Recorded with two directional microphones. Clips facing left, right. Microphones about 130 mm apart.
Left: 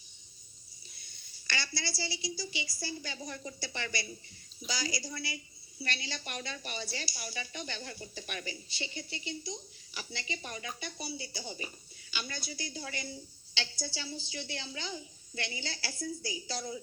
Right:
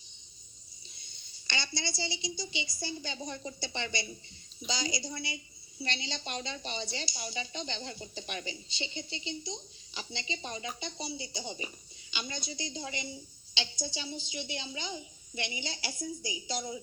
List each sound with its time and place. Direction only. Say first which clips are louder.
0.9 s a woman's voice: right 1 dB; 20° right (ahead or behind)